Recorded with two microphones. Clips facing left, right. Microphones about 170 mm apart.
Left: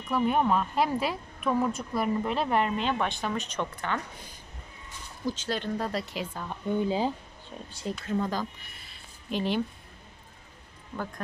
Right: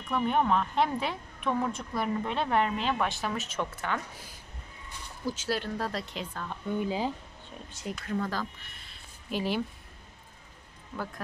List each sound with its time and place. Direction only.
0.1 s a woman's voice: 5° left (ahead or behind)
6.8 s speech: 30° left (ahead or behind)
8.1 s speech: 20° left (ahead or behind)
9.3 s a woman's voice: 5° right (ahead or behind)